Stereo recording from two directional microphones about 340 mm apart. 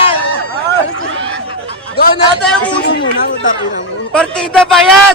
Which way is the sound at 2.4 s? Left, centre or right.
Centre.